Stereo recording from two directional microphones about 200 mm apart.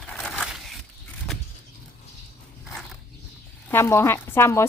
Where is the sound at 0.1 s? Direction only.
5° left (ahead or behind).